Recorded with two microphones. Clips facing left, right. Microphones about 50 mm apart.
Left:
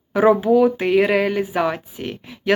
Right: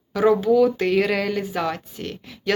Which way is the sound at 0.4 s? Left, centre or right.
Left.